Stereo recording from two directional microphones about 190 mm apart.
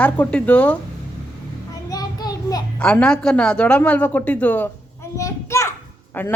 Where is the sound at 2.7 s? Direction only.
5° left (ahead or behind).